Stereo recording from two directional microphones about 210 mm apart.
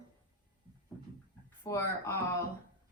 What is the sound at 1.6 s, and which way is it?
Speech, 10° left (ahead or behind).